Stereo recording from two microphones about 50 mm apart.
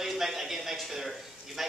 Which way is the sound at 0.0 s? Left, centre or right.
Centre.